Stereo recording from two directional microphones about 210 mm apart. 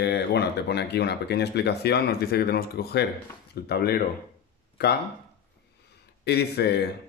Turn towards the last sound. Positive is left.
turn(degrees=50)  # may be behind; listen again after turning